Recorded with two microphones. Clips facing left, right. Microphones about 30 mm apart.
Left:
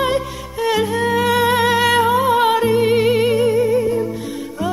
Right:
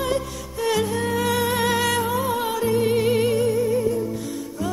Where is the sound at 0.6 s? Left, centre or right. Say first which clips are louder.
Left 5 dB; left.